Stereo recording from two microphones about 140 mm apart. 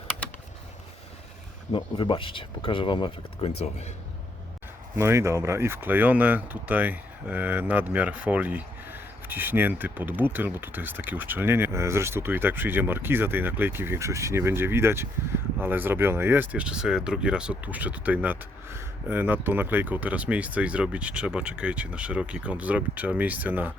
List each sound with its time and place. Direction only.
1.7 s speech: 35° left (ahead or behind)
4.9 s speech: 20° right (ahead or behind)